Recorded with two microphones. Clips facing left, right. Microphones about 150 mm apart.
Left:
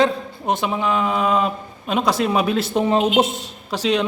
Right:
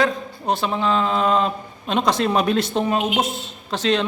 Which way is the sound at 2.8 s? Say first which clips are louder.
Left 4 dB; 25° left (ahead or behind).